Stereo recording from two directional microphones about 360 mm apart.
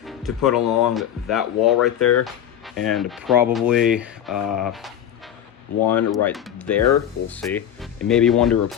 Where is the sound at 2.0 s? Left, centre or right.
Left.